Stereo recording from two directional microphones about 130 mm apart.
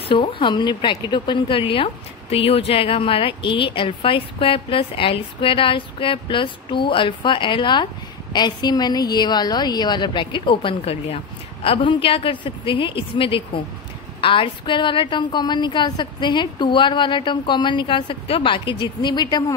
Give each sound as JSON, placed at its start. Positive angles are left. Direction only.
{"t": 0.1, "sound": "a woman's voice", "side_deg": 40}